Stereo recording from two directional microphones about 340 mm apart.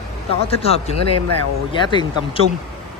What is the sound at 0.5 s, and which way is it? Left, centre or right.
Speech, centre.